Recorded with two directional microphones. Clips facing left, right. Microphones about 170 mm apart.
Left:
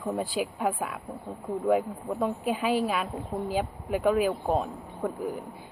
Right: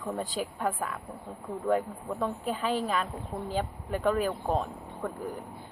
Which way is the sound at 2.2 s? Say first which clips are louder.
Left 3 dB; 10° left (ahead or behind).